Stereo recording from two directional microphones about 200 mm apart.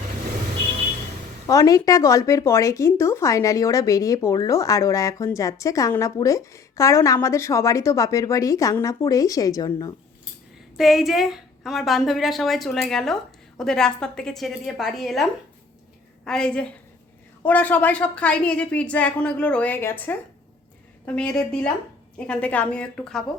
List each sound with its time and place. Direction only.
1.5 s speech: 15° left (ahead or behind)
10.8 s a woman's voice: centre (ahead or behind)
21.2 s a woman's voice: 5° left (ahead or behind)